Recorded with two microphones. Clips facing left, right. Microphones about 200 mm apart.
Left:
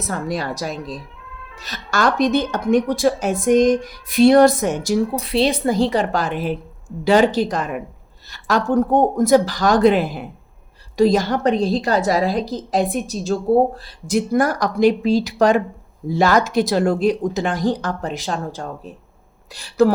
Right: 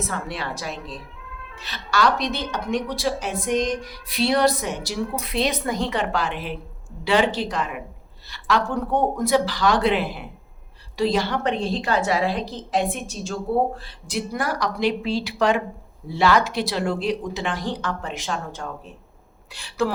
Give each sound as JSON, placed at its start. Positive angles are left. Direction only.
{"t": 0.1, "sound": "a woman's voice", "side_deg": 40}
{"t": 5.2, "sound": "a woman's voice", "side_deg": 30}